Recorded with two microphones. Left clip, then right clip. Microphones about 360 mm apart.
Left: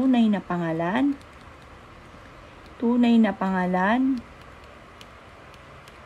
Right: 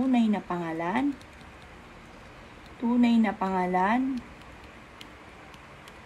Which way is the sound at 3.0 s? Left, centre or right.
Left.